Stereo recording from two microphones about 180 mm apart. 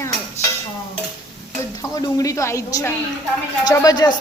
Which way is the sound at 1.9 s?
20° left (ahead or behind).